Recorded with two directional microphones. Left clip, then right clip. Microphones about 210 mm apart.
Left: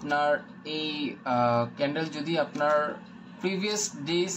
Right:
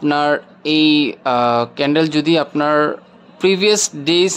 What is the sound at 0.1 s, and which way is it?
Speech, 55° right (ahead or behind).